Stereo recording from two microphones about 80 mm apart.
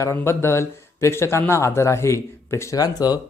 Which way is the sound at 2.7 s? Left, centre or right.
Left.